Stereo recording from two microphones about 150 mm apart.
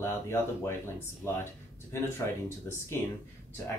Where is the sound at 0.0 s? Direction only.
20° left (ahead or behind).